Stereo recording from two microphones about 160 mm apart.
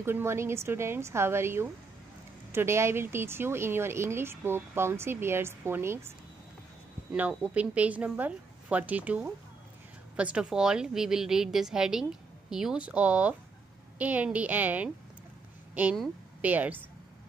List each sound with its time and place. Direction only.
0.0 s a woman's voice: 15° right (ahead or behind)